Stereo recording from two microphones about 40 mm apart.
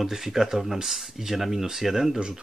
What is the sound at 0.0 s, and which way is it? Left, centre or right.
Speech, centre.